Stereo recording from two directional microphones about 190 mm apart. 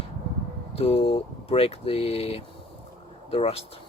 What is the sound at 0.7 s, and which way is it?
Speech, 30° left (ahead or behind).